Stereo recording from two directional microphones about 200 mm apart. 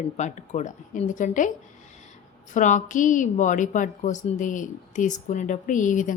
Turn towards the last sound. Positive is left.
turn(degrees=40)  # may be behind; listen again after turning